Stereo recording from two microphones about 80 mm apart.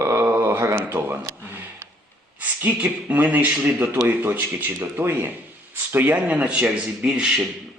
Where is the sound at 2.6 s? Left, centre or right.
Centre.